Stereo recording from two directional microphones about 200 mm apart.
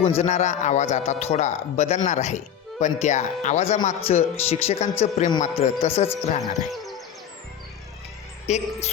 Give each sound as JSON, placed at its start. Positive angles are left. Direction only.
{"t": 0.0, "sound": "speech", "side_deg": 35}
{"t": 6.4, "sound": "speech", "side_deg": 0}
{"t": 8.4, "sound": "speech", "side_deg": 35}